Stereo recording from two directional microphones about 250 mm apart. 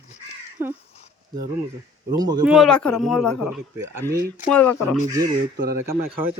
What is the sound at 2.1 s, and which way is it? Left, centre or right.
Speech, centre.